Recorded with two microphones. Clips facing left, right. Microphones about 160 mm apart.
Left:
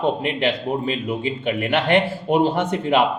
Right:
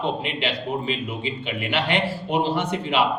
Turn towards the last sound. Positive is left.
turn(degrees=50)  # may be behind; listen again after turning